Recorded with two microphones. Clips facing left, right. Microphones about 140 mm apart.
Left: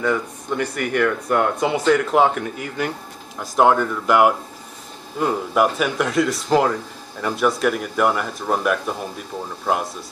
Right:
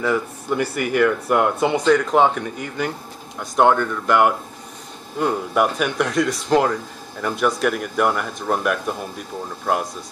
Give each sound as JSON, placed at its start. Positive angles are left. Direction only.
{"t": 0.0, "sound": "speech", "side_deg": -5}